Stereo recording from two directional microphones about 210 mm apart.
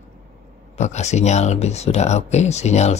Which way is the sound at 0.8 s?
30° left (ahead or behind).